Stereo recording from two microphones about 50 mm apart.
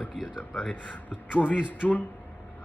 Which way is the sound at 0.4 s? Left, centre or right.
Left.